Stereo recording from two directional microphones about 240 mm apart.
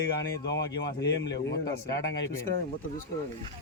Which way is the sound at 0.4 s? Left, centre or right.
Left.